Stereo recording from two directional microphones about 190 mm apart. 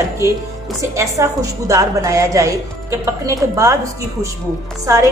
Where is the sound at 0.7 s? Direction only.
15° right (ahead or behind).